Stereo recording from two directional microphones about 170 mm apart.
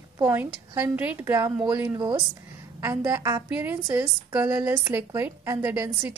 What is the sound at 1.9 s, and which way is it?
Speech, 25° right (ahead or behind).